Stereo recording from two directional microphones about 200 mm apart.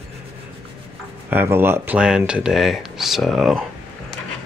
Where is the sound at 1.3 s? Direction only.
10° right (ahead or behind).